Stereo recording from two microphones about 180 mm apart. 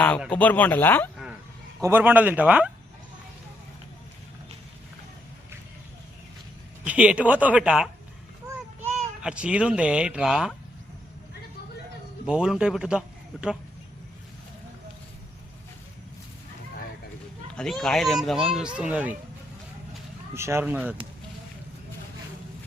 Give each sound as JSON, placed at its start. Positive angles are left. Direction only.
{"t": 0.3, "sound": "speech", "side_deg": 10}
{"t": 1.8, "sound": "speech", "side_deg": -10}
{"t": 6.8, "sound": "speech", "side_deg": -5}
{"t": 8.9, "sound": "speech", "side_deg": 0}
{"t": 12.2, "sound": "a man's voice", "side_deg": -5}
{"t": 17.5, "sound": "speech", "side_deg": 5}
{"t": 20.3, "sound": "speech", "side_deg": -15}